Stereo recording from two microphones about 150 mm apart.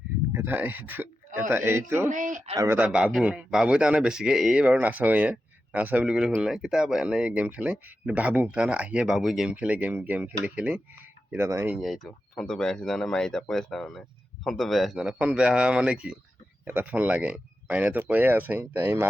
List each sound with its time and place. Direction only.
0.3 s speech: 10° right (ahead or behind)
2.0 s speech: 60° right (ahead or behind)
2.7 s speech: 5° right (ahead or behind)
11.7 s speech: centre (ahead or behind)